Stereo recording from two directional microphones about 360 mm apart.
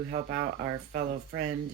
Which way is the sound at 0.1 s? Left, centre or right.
Right.